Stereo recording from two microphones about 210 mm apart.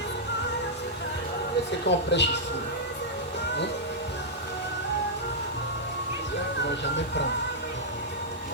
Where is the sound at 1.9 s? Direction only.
55° left (ahead or behind).